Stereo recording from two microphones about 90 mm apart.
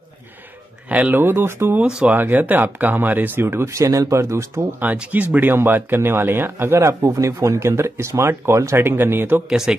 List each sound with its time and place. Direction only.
0.8 s speech: 15° right (ahead or behind)
1.8 s speech: 10° right (ahead or behind); by 4.5 s 35° right (ahead or behind)
4.6 s speech: 20° right (ahead or behind)
9.5 s speech: 10° right (ahead or behind)